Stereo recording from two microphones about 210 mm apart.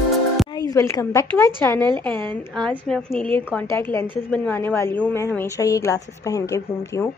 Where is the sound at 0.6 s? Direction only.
15° left (ahead or behind).